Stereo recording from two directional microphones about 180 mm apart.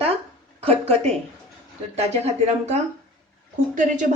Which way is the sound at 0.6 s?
35° right (ahead or behind).